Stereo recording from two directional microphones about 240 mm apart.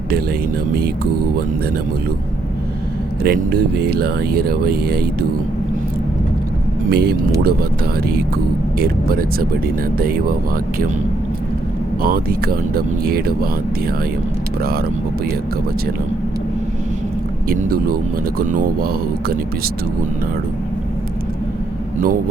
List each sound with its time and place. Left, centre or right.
3.2 s speech: right
6.9 s speech: right
12.0 s speech: right
14.6 s speech: right
17.5 s speech: right